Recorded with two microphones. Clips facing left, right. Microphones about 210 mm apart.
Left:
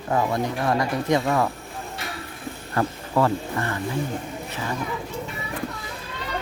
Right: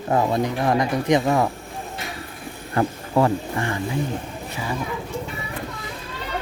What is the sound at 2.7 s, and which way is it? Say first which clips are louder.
Speech: right 2 dB; 15° right (ahead or behind).